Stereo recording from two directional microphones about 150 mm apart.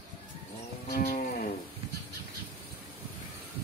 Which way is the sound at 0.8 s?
85° left.